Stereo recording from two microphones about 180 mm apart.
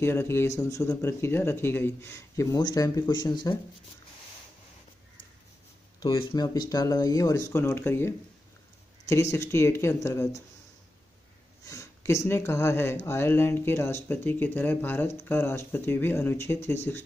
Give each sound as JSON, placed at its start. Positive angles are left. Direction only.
{"t": 0.0, "sound": "speech", "side_deg": 15}
{"t": 5.9, "sound": "speech", "side_deg": 25}
{"t": 9.1, "sound": "speech", "side_deg": 15}
{"t": 11.6, "sound": "speech", "side_deg": 15}